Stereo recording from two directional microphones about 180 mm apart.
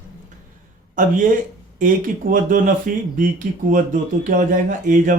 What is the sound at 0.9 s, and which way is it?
Speech, 50° right (ahead or behind).